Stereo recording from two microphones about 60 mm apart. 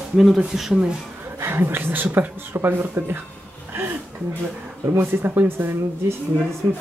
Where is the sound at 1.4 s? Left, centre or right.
Right.